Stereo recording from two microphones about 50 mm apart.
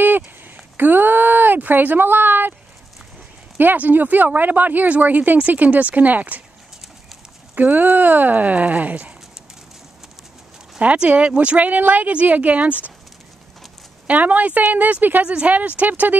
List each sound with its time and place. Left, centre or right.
0.7 s speech: right
3.5 s speech: right
7.5 s speech: right
10.8 s speech: right
14.0 s speech: right
15.2 s speech: right